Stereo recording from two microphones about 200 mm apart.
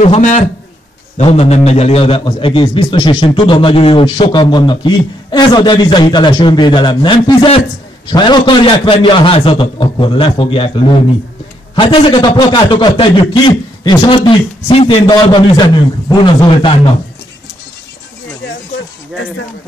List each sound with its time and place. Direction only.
0.0 s a man's voice: 35° left (ahead or behind)